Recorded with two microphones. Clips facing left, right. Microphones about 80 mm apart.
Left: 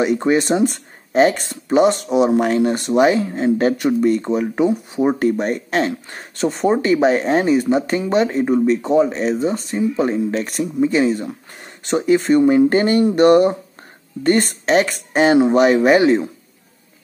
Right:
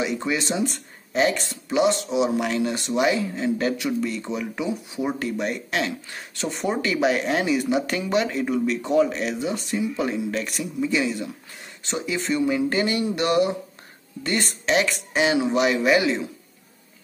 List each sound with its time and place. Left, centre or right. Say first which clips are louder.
0.0 s speech: left 9 dB; left